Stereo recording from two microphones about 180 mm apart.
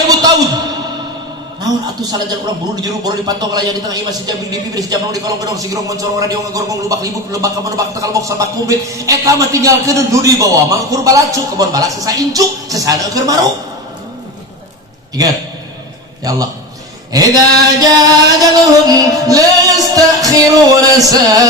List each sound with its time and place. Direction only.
0.2 s a sound: 20° right (ahead or behind)
1.6 s a man's voice: 20° right (ahead or behind)
17.1 s a man's voice: 20° right (ahead or behind)
18.5 s music: 20° right (ahead or behind)